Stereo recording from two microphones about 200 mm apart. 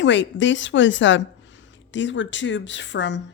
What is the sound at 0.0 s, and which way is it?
A woman's voice, 65° left (ahead or behind).